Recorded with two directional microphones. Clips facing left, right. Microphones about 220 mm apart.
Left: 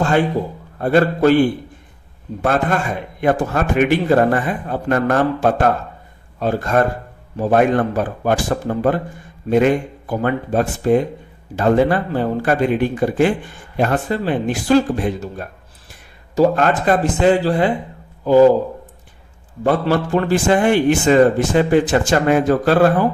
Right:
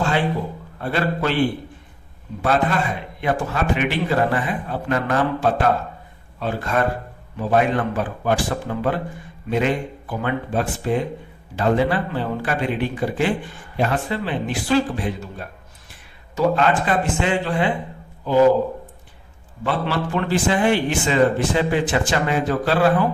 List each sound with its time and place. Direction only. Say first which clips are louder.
0.8 s a man's voice: left 8 dB; 45° left (ahead or behind)
2.4 s a man's voice: left 2 dB; 50° left (ahead or behind)
19.6 s a man's voice: left 6 dB; 45° left (ahead or behind)